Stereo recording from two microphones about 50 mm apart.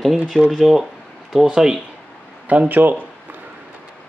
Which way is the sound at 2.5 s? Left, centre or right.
Right.